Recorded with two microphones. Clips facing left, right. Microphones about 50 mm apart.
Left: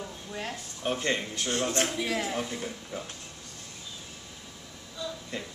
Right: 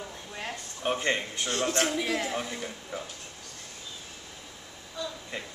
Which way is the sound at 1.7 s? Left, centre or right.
Right.